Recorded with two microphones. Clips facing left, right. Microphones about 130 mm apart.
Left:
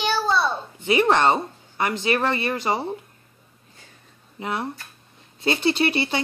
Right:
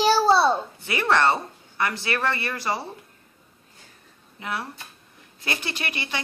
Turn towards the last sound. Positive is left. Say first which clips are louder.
# left 11 dB
turn(degrees=30)  # may be behind; listen again after turning